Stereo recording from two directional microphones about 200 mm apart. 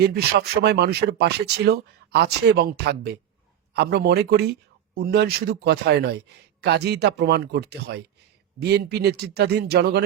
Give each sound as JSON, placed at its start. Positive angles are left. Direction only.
{"t": 0.0, "sound": "speech", "side_deg": -55}